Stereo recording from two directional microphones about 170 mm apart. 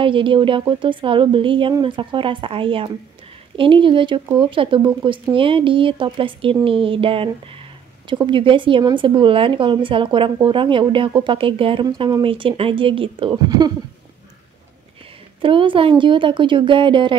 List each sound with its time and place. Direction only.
0.0 s speech: 30° right (ahead or behind)
15.4 s speech: 30° right (ahead or behind)